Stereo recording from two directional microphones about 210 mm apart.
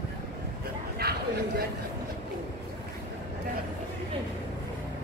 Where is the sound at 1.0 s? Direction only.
50° right (ahead or behind).